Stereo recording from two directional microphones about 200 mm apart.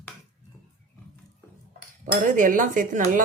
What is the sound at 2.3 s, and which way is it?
Speech, 40° right (ahead or behind).